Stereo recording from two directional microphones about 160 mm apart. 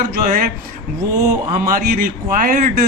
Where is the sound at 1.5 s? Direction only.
65° right (ahead or behind).